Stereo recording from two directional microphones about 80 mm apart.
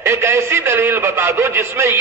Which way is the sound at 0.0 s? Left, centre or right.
Right.